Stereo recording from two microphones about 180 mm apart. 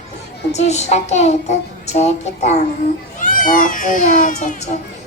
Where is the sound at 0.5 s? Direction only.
40° left (ahead or behind).